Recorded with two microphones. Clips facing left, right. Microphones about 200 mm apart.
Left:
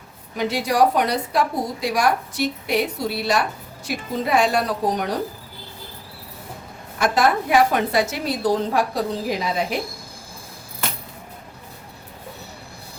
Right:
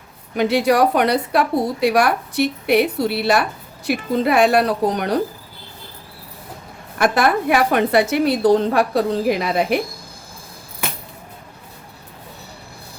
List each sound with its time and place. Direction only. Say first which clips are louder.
0.3 s a woman's voice: right 4 dB; 65° right (ahead or behind)
7.0 s a woman's voice: right 2 dB; 65° right (ahead or behind)